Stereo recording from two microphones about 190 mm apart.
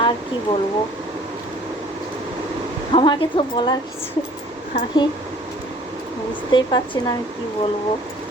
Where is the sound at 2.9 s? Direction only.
25° left (ahead or behind).